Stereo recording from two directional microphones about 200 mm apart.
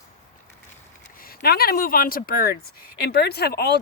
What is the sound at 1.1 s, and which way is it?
Speech, 50° left (ahead or behind).